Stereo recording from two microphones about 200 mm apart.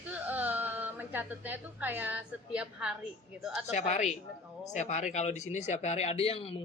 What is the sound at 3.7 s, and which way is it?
Speech, 35° left (ahead or behind).